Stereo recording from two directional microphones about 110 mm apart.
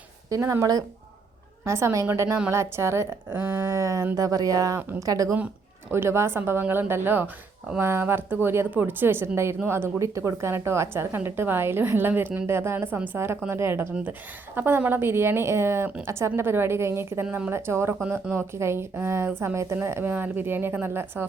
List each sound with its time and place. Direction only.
0.3 s a woman's voice: 30° right (ahead or behind)